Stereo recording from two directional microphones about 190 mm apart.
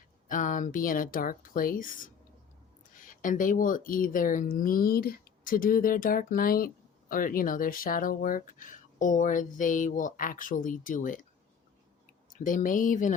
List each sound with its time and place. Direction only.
0.3 s speech: 45° left (ahead or behind)
2.9 s speech: 45° left (ahead or behind)
12.3 s speech: 45° left (ahead or behind)